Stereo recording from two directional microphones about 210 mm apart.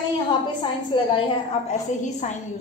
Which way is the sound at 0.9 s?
25° left (ahead or behind).